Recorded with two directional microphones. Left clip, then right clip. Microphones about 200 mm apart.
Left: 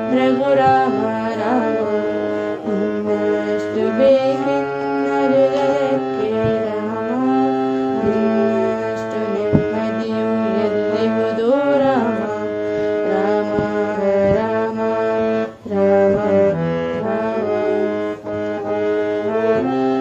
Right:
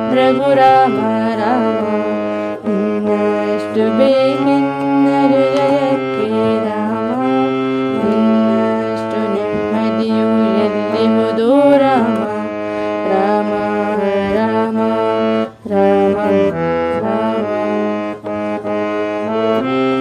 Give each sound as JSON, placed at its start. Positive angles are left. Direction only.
{"t": 0.1, "sound": "music", "side_deg": -50}
{"t": 3.8, "sound": "music", "side_deg": -50}
{"t": 8.1, "sound": "music", "side_deg": -50}
{"t": 10.4, "sound": "music", "side_deg": -50}
{"t": 15.8, "sound": "music", "side_deg": -55}